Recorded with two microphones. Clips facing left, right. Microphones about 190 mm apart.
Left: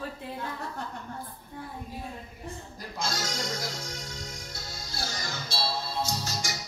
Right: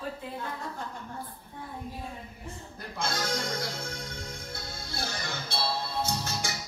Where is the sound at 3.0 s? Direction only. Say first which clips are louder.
Right 2 dB; 55° right (ahead or behind).